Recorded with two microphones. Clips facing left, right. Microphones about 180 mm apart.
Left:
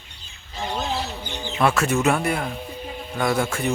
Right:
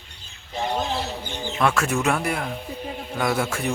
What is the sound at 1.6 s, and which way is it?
A man's voice, centre (ahead or behind).